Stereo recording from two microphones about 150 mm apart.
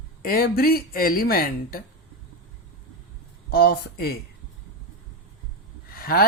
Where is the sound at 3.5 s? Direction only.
90° left.